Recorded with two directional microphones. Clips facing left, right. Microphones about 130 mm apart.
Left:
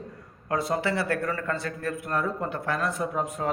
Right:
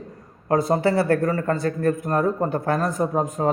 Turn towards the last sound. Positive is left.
turn(degrees=-40)  # may be behind; listen again after turning